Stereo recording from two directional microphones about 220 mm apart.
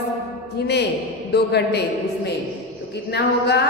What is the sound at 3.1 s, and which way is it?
Speech, 50° left (ahead or behind).